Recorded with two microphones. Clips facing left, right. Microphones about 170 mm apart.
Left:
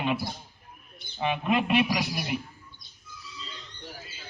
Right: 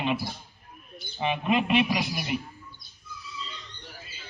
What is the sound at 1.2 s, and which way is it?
A man's voice, centre (ahead or behind).